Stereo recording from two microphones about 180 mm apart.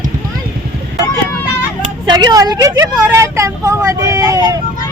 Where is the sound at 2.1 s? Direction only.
25° right (ahead or behind).